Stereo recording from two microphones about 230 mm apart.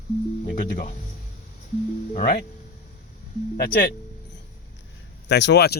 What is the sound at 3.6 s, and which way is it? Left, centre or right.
Speech, left.